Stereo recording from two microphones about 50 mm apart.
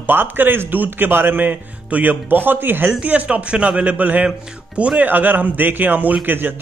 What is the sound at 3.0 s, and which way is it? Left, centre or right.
A man's voice, right.